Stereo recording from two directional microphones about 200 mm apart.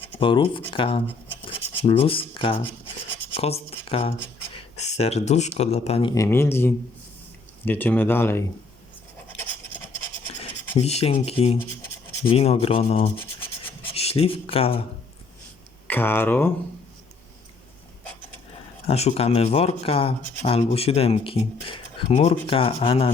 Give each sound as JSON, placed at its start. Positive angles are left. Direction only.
{"t": 0.2, "sound": "speech", "side_deg": 25}
{"t": 1.5, "sound": "cutlery", "side_deg": 30}
{"t": 2.6, "sound": "rub", "side_deg": 10}
{"t": 3.3, "sound": "speech", "side_deg": 30}
{"t": 10.8, "sound": "speech", "side_deg": 30}
{"t": 13.1, "sound": "rub", "side_deg": 10}
{"t": 13.9, "sound": "speech", "side_deg": 30}
{"t": 15.9, "sound": "speech", "side_deg": 10}
{"t": 18.9, "sound": "speech", "side_deg": 30}